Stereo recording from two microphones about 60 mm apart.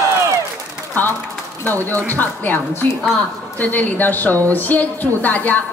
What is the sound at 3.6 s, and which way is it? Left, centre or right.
A woman's voice, left.